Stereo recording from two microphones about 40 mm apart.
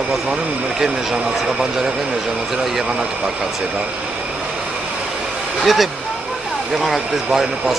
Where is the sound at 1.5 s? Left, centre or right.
Centre.